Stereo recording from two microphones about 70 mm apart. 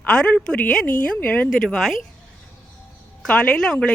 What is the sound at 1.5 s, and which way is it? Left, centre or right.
Speech, centre.